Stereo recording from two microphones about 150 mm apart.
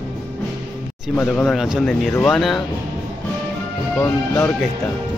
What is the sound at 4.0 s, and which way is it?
Speech, 15° left (ahead or behind).